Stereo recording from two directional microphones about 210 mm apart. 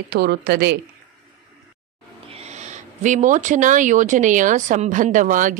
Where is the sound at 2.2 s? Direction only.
30° right (ahead or behind).